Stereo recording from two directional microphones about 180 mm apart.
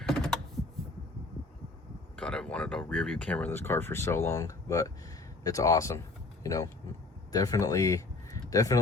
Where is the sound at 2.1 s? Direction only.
5° left (ahead or behind).